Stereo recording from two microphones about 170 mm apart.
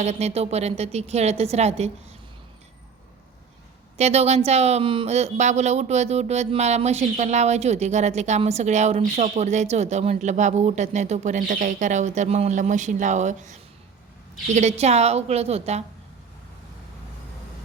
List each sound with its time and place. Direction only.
0.0 s speech: 40° right (ahead or behind)
3.9 s speech: 40° right (ahead or behind)